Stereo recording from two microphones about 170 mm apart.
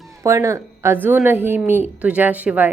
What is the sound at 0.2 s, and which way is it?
A woman's voice, 20° right (ahead or behind).